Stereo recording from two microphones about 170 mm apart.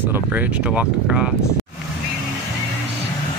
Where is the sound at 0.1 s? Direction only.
10° right (ahead or behind).